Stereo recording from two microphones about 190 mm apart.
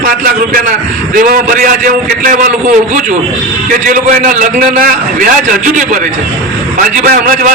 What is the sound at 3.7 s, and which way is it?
A man's voice, 40° right (ahead or behind).